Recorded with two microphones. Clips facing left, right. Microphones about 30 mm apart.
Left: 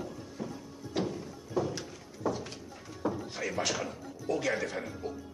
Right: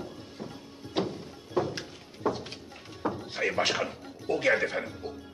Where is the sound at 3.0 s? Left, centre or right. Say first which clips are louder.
Right 4 dB; right.